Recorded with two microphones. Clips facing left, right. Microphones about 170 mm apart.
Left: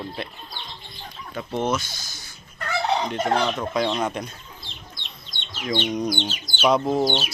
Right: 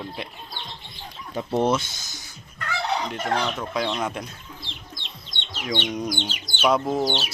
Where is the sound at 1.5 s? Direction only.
35° right (ahead or behind).